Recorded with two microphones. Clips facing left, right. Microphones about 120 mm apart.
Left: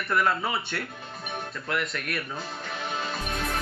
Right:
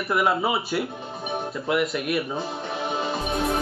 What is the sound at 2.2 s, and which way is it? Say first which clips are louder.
Music: right 7 dB; 25° right (ahead or behind).